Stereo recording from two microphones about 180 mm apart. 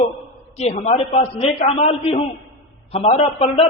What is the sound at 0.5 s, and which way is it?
A man's voice, 35° left (ahead or behind).